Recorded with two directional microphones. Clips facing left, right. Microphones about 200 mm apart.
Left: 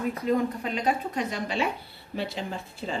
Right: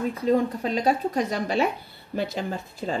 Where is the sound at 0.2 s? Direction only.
35° right (ahead or behind).